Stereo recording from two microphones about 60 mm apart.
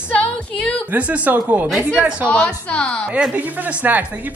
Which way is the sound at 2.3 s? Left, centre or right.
Centre.